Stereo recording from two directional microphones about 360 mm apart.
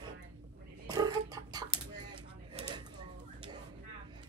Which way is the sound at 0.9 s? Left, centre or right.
Centre.